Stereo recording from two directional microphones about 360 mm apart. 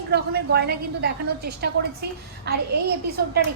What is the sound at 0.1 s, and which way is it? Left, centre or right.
Speech, right.